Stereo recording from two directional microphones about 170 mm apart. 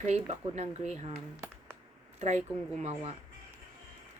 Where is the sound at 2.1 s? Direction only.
40° right (ahead or behind).